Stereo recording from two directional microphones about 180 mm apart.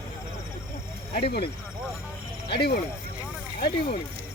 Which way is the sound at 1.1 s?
60° left (ahead or behind).